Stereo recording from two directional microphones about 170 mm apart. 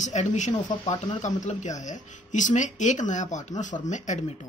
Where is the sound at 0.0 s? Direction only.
45° left (ahead or behind).